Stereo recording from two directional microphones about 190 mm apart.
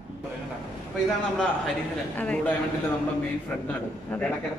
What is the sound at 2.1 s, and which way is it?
Speech, 5° left (ahead or behind).